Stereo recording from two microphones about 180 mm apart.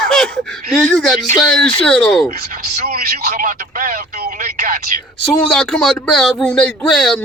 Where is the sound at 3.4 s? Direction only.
50° right (ahead or behind).